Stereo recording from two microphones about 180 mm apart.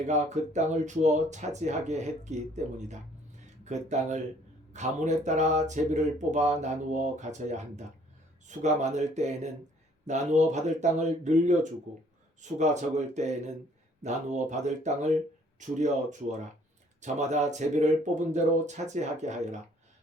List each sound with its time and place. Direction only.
0.1 s speech: 40° right (ahead or behind)